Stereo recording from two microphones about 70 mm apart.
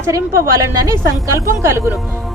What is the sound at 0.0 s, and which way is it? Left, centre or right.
A woman's voice, right.